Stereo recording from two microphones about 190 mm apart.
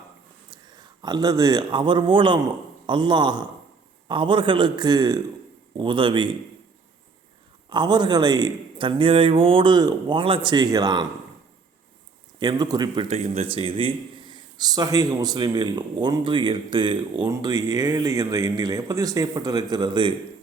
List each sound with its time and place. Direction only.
0.7 s a man's voice: 20° right (ahead or behind)
7.7 s a man's voice: 25° right (ahead or behind)
12.4 s a man's voice: 20° right (ahead or behind)
13.1 s a man's voice: 35° right (ahead or behind)